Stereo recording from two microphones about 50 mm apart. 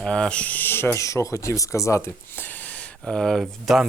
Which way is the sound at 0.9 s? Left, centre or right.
Left.